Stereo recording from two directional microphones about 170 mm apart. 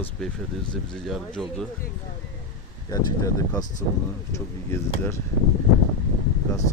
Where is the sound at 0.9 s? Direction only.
5° left (ahead or behind).